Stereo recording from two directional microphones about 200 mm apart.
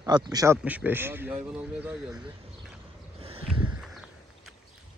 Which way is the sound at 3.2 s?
30° right (ahead or behind).